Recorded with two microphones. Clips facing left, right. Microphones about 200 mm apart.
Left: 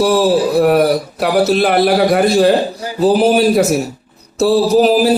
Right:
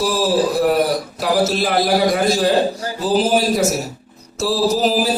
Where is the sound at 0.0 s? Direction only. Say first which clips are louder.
Left 5 dB; 65° left (ahead or behind).